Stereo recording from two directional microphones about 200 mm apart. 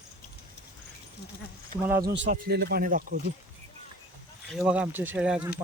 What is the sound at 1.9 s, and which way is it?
Speech, 50° right (ahead or behind).